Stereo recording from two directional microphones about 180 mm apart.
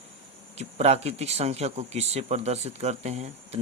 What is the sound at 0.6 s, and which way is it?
Speech, 35° right (ahead or behind).